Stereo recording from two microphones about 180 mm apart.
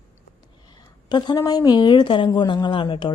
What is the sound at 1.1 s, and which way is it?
A woman's voice, 25° left (ahead or behind).